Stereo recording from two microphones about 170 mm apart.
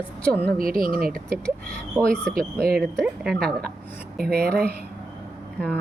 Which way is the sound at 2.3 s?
60° right (ahead or behind).